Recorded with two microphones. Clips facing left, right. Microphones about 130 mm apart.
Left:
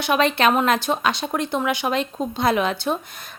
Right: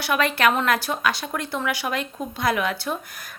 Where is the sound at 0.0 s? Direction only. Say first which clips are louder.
Left 2 dB; 20° left (ahead or behind).